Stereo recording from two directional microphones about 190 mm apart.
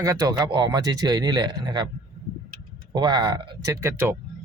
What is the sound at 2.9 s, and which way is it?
A man's voice, 20° right (ahead or behind).